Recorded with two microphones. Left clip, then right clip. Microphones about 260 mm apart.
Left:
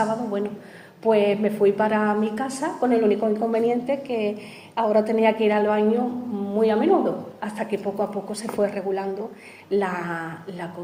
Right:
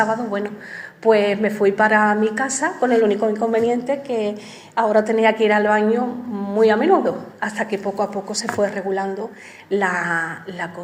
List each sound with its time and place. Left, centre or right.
0.0 s a woman's voice: right